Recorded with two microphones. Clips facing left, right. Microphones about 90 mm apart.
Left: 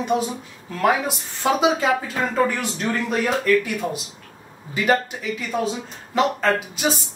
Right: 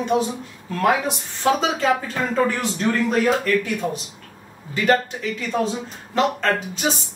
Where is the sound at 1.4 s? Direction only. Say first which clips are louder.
Even; 5° left (ahead or behind).